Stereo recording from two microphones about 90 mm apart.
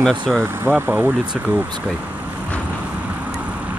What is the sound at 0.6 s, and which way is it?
Speech, 20° right (ahead or behind).